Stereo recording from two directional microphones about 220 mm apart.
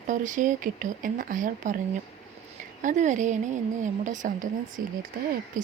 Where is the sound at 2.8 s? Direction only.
35° right (ahead or behind).